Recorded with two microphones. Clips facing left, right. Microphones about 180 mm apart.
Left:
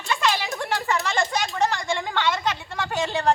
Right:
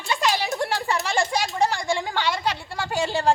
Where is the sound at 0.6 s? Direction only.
35° right (ahead or behind).